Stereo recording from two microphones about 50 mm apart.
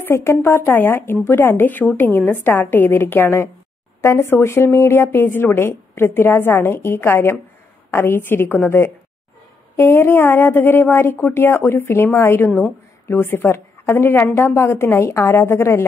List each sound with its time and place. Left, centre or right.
0.0 s a woman's voice: left
4.0 s a woman's voice: left